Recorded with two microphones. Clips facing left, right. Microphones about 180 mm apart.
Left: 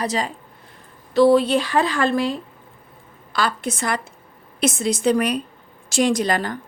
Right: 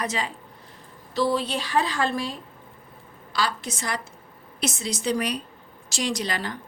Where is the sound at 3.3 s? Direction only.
55° left (ahead or behind).